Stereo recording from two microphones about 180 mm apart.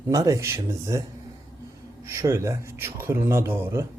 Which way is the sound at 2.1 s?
15° right (ahead or behind).